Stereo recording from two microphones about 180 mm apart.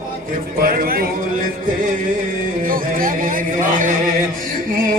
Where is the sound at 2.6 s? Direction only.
50° right (ahead or behind).